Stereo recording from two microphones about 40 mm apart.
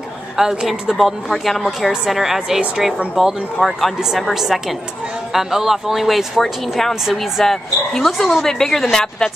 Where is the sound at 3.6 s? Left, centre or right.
Left.